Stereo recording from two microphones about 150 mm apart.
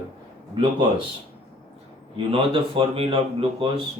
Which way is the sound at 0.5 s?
30° right (ahead or behind).